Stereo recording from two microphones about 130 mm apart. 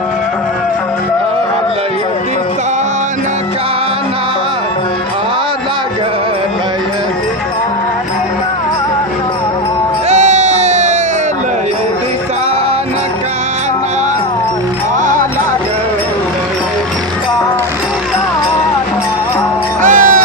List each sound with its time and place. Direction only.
10.1 s a sound: 60° right (ahead or behind)
15.0 s music: 90° right
19.8 s music: 90° right